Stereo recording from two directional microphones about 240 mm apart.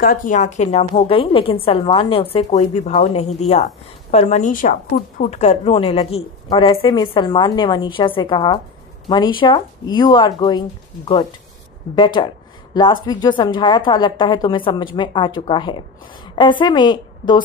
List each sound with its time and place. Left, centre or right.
0.0 s a woman's voice: left; by 10.6 s centre
11.9 s a woman's voice: centre